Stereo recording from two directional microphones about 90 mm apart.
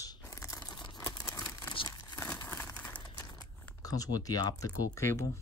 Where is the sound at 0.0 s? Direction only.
40° left (ahead or behind).